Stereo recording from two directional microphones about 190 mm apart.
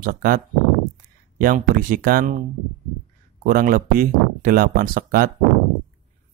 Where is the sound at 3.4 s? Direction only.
50° right (ahead or behind).